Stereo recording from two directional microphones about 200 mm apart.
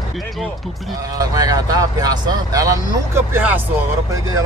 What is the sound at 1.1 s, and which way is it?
Speech, 20° right (ahead or behind).